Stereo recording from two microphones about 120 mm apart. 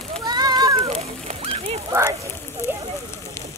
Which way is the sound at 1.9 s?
25° right (ahead or behind).